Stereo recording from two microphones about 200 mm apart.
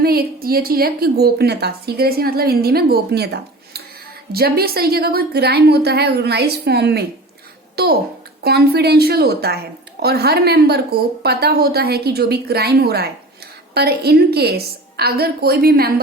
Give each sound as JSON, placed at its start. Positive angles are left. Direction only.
{"t": 0.0, "sound": "a woman's voice", "side_deg": -50}